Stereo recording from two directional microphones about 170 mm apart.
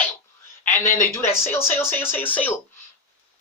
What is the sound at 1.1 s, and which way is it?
Speech, 15° left (ahead or behind).